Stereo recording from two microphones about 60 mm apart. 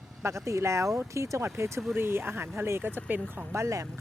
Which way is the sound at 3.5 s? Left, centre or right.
Right.